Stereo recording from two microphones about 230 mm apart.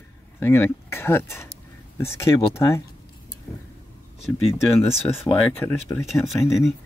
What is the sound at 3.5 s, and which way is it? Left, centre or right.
Vehicle, centre.